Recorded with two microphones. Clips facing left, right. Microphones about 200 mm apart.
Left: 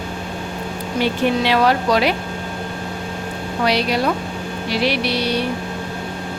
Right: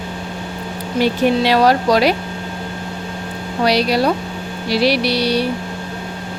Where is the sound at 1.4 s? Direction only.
40° right (ahead or behind).